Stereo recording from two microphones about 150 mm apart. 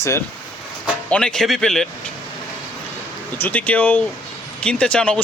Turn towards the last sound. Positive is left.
turn(degrees=5)  # may be behind; listen again after turning